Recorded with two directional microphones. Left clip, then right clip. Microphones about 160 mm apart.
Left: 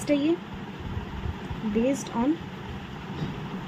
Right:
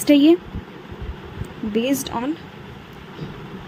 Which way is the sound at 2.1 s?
60° right (ahead or behind).